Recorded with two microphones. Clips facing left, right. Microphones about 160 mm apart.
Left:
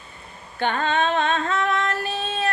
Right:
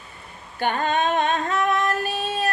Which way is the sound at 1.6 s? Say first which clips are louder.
Right 2 dB; 15° right (ahead or behind).